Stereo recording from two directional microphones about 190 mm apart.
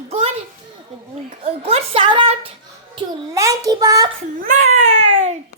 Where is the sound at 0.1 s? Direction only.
35° right (ahead or behind).